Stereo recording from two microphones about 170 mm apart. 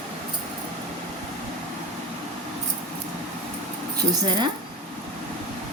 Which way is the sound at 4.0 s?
25° right (ahead or behind).